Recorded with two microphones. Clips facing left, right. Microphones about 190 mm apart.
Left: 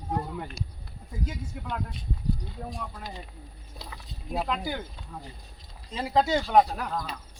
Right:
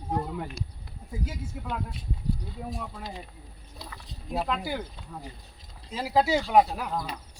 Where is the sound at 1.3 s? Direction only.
5° right (ahead or behind).